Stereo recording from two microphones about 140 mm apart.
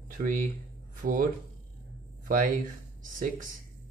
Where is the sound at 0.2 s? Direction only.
70° right (ahead or behind).